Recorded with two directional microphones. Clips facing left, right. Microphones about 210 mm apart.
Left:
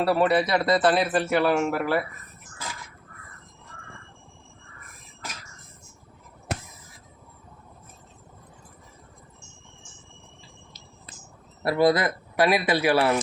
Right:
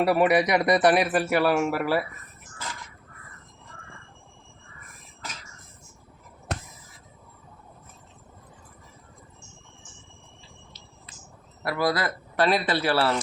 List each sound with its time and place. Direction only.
0.0 s a man's voice: 15° right (ahead or behind)
6.5 s a sound: 5° left (ahead or behind)
11.6 s speech: 25° left (ahead or behind)